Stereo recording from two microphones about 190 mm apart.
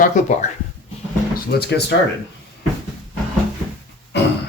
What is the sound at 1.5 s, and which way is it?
Speech, 60° left (ahead or behind).